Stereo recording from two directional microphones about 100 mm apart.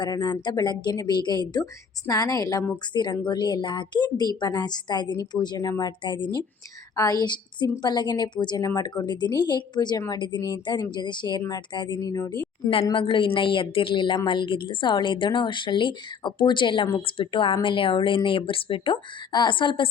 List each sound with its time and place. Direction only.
0.0 s a woman's voice: 45° left (ahead or behind)
6.0 s a woman's voice: 50° left (ahead or behind)
6.9 s a woman's voice: 40° left (ahead or behind)
12.9 s a woman's voice: 60° left (ahead or behind)
19.3 s speech: 50° left (ahead or behind)